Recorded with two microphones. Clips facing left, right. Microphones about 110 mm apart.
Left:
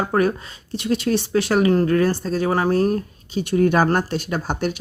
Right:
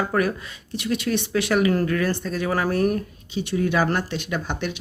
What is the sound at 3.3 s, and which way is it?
Speech, 45° left (ahead or behind).